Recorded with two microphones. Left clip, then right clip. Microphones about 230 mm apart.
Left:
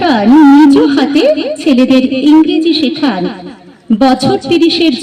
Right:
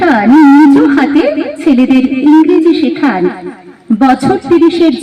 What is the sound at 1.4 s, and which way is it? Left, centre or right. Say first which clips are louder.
Speech: even; left.